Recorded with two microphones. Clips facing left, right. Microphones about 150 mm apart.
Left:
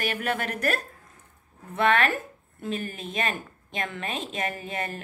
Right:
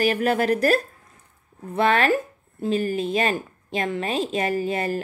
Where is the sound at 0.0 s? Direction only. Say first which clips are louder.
Right 8 dB; 35° right (ahead or behind).